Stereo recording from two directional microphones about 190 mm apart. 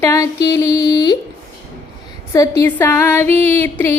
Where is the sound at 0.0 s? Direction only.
15° left (ahead or behind).